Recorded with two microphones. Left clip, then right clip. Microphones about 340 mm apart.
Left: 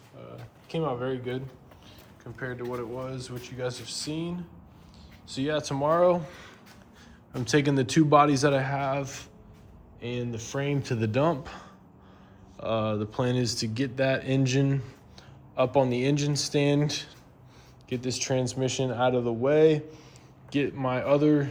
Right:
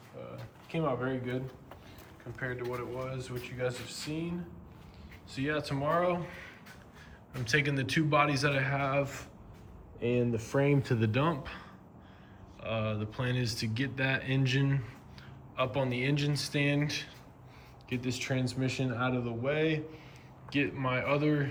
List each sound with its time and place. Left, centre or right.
0.7 s speech: centre
2.4 s speech: centre
5.3 s speech: centre
7.3 s speech: centre